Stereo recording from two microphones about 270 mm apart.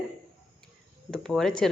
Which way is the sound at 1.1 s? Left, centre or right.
Centre.